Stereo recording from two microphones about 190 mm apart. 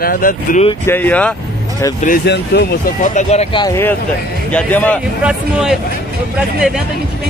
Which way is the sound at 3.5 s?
20° left (ahead or behind).